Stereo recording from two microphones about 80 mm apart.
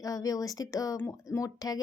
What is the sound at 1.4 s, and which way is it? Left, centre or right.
Speech, left.